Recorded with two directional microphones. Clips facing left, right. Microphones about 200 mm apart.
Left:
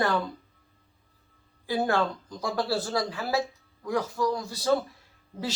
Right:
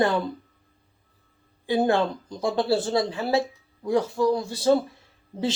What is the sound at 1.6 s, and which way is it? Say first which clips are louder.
Speech: right 4 dB; 25° right (ahead or behind).